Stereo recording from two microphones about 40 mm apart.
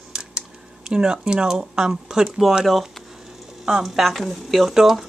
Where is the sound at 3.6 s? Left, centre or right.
Centre.